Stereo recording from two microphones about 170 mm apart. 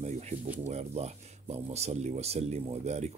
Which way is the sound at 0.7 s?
40° right (ahead or behind).